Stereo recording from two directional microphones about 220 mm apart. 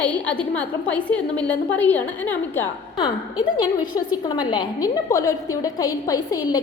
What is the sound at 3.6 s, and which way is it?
A woman's voice, 20° left (ahead or behind).